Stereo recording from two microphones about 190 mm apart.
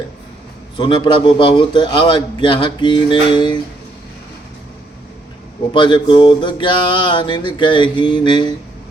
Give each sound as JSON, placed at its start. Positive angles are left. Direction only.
{"t": 0.8, "sound": "a man's voice", "side_deg": 25}
{"t": 5.7, "sound": "a man's voice", "side_deg": 25}